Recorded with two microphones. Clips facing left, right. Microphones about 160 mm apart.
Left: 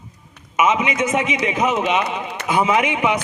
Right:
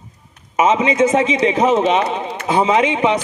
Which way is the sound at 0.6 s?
30° right (ahead or behind).